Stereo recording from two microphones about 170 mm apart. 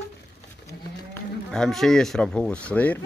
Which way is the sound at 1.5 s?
5° left (ahead or behind).